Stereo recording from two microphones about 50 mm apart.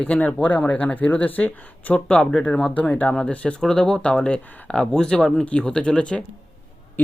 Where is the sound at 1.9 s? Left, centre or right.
Left.